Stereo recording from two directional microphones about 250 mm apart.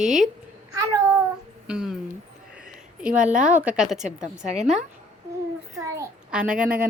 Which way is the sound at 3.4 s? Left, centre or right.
Centre.